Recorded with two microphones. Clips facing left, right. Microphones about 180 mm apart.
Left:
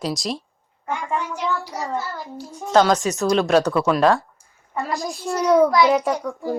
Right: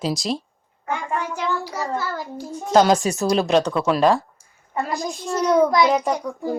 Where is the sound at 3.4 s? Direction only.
Centre (ahead or behind).